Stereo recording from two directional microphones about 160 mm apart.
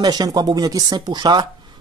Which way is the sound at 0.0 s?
25° right (ahead or behind).